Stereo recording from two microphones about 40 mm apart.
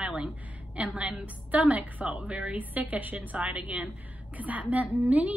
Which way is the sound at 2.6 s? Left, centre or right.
Right.